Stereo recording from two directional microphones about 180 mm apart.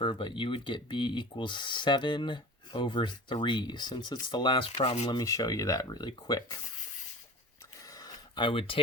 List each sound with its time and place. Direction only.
0.0 s speech: 25° left (ahead or behind)
5.1 s speech: 20° left (ahead or behind)
7.9 s a sound: 25° left (ahead or behind)